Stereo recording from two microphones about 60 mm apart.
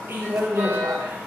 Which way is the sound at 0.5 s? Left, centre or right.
Right.